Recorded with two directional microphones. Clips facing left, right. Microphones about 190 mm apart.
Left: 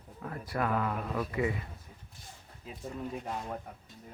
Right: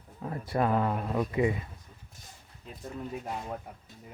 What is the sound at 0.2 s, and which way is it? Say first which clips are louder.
Speech: right 5 dB; 25° right (ahead or behind).